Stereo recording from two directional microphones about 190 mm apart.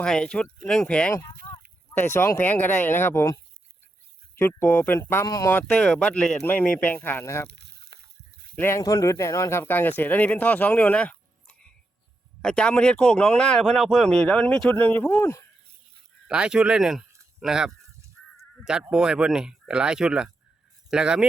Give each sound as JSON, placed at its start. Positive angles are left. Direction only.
{"t": 0.0, "sound": "speech", "side_deg": 5}
{"t": 7.4, "sound": "a sound", "side_deg": -60}
{"t": 8.5, "sound": "speech", "side_deg": 15}
{"t": 16.2, "sound": "speech", "side_deg": -5}